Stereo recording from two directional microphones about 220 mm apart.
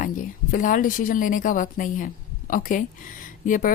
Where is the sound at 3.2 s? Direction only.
35° left (ahead or behind).